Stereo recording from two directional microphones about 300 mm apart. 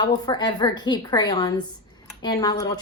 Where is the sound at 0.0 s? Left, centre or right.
Centre.